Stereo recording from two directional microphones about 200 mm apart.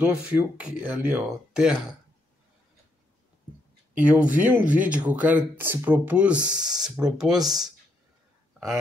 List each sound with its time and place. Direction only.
0.0 s speech: 10° right (ahead or behind)
4.0 s speech: 5° right (ahead or behind)